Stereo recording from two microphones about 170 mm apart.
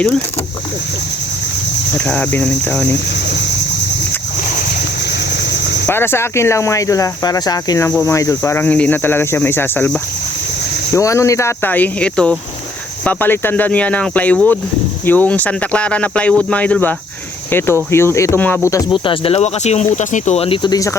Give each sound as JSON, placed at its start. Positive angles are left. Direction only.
{"t": 2.0, "sound": "speech", "side_deg": 5}
{"t": 5.8, "sound": "speech", "side_deg": 15}
{"t": 17.9, "sound": "speech", "side_deg": 15}
{"t": 18.9, "sound": "speech", "side_deg": 30}